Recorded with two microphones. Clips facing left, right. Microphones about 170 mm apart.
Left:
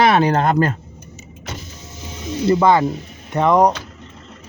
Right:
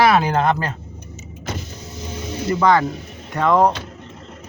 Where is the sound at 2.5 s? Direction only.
20° left (ahead or behind).